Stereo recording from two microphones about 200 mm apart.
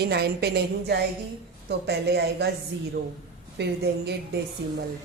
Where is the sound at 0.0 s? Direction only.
55° right (ahead or behind).